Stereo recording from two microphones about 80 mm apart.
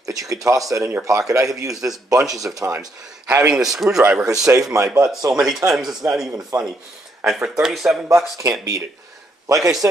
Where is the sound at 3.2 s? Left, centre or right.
Right.